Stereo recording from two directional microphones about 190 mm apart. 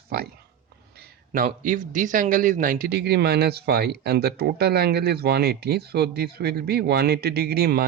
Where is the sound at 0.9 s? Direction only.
45° right (ahead or behind).